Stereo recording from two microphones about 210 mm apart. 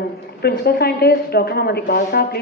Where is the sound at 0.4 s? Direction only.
50° left (ahead or behind).